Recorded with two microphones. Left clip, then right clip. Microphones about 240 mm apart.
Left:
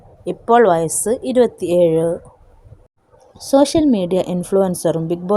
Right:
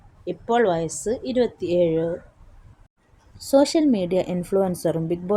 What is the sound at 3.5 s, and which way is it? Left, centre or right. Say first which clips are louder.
A woman's voice: left 4 dB; left.